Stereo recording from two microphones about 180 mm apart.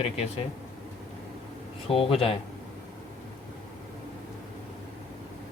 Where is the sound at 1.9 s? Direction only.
30° left (ahead or behind).